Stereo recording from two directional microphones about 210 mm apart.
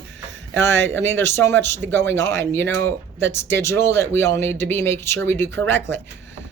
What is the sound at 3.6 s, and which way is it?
Speech, 10° left (ahead or behind).